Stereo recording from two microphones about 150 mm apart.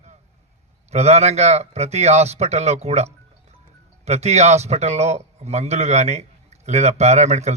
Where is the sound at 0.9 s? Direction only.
45° right (ahead or behind).